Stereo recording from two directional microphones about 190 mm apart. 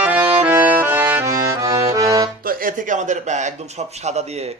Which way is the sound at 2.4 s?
45° right (ahead or behind).